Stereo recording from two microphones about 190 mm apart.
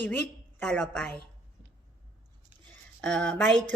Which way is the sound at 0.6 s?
5° left (ahead or behind).